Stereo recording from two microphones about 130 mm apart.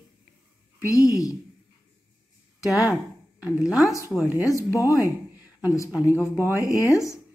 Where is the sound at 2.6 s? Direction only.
25° left (ahead or behind).